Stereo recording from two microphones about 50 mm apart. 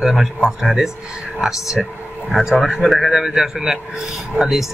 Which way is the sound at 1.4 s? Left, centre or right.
Centre.